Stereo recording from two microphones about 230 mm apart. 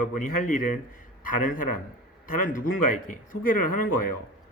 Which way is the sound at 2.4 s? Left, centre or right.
Left.